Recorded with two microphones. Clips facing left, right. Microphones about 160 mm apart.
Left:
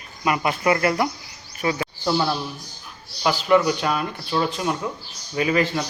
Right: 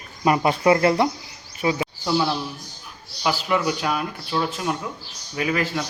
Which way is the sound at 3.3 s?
5° right (ahead or behind).